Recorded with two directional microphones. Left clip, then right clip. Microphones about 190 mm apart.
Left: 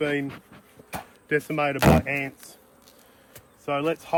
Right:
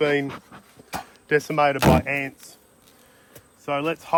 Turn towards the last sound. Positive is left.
turn(degrees=-10)  # may be behind; listen again after turning